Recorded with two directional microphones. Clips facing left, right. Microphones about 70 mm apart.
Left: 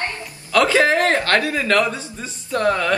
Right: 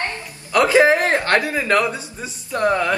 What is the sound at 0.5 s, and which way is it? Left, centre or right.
A man's voice, centre.